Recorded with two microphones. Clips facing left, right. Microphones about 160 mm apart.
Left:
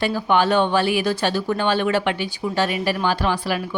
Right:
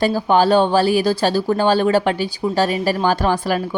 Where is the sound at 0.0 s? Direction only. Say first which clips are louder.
Right 4 dB; 35° right (ahead or behind).